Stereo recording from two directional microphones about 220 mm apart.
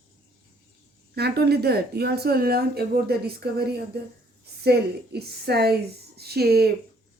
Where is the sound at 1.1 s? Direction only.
45° right (ahead or behind).